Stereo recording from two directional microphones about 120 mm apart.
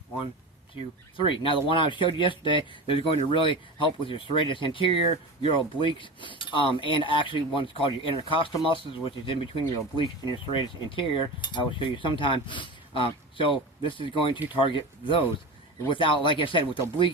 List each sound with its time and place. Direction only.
1.1 s speech: 45° left (ahead or behind)